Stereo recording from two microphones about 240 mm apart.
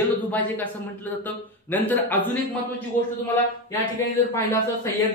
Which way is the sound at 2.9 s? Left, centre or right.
Left.